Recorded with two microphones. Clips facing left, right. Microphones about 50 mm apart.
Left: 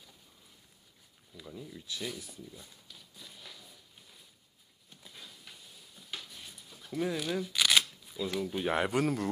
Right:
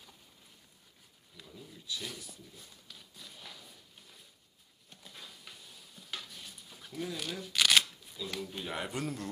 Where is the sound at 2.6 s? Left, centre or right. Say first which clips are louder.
Even; centre.